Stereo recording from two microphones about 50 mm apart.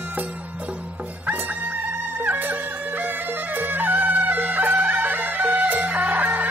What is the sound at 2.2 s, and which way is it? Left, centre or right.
Music, right.